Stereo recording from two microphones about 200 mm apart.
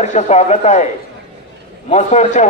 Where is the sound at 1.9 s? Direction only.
35° left (ahead or behind).